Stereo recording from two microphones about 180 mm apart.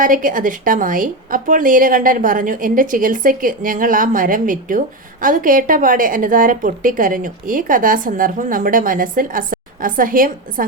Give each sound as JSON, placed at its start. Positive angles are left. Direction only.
{"t": 0.0, "sound": "a woman's voice", "side_deg": -50}